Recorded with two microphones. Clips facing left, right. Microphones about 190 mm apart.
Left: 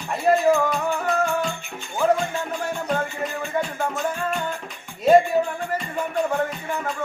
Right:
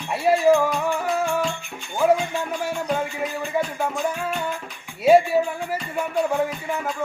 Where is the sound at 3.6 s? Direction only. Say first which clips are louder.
Right 1 dB; centre (ahead or behind).